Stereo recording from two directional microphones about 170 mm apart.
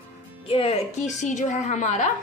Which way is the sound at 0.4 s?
35° left (ahead or behind).